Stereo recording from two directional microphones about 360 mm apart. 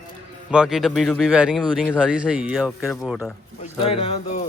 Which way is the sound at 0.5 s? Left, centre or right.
Centre.